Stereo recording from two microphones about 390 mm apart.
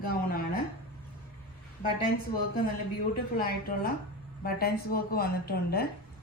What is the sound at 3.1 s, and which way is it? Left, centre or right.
A woman's voice, left.